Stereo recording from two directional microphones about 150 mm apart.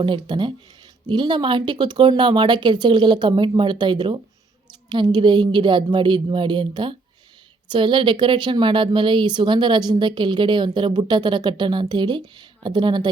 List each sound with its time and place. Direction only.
0.0 s speech: 30° right (ahead or behind)